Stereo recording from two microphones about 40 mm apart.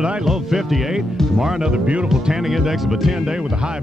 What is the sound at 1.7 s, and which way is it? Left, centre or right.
Speech, right.